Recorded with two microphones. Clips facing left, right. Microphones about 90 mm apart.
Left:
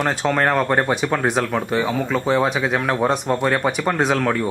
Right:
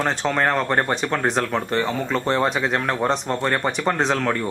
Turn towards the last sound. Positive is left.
turn(degrees=5)  # may be behind; listen again after turning